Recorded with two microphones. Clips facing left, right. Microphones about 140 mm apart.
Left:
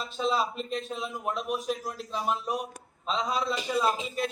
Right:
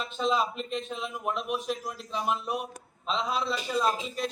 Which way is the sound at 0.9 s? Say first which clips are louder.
Even; 10° left (ahead or behind).